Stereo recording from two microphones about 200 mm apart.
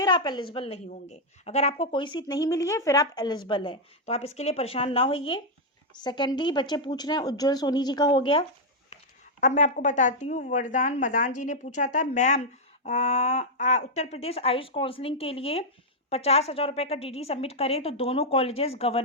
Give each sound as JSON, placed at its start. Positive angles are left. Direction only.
{"t": 0.0, "sound": "speech", "side_deg": 20}
{"t": 9.4, "sound": "a woman's voice", "side_deg": 40}